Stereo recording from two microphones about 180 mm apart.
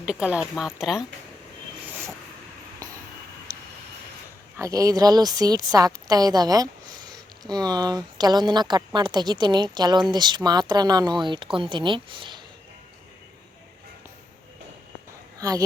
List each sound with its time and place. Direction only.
0.0 s speech: 5° right (ahead or behind)
4.5 s speech: 20° right (ahead or behind)
15.4 s speech: 20° right (ahead or behind)